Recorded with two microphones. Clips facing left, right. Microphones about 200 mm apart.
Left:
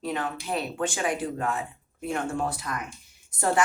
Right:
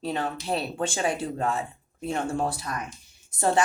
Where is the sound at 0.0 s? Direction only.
30° right (ahead or behind).